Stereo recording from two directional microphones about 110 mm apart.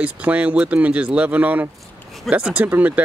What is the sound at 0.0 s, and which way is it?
Speech, 15° right (ahead or behind).